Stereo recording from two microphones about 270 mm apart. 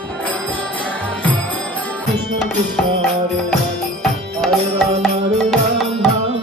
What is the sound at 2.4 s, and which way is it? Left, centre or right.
Music, centre.